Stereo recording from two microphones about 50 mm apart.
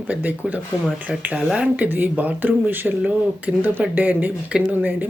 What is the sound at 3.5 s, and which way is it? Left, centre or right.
Speech, right.